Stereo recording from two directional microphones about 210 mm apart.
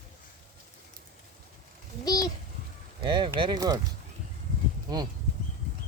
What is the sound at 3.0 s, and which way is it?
Speech, 20° right (ahead or behind).